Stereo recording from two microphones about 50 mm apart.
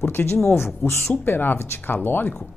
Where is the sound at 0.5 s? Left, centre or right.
Left.